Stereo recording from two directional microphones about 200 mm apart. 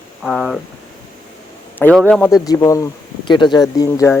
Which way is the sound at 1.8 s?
5° left (ahead or behind).